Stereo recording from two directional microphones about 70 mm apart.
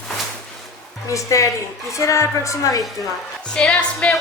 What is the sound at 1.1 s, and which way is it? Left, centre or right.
A woman's voice, left.